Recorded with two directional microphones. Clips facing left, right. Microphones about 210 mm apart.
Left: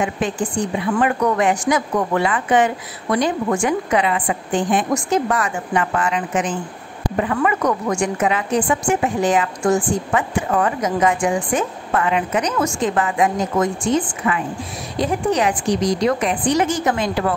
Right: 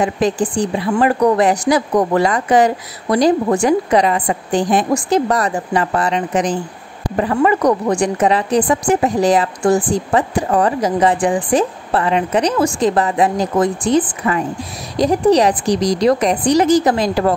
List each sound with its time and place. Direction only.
0.0 s a woman's voice: 35° right (ahead or behind)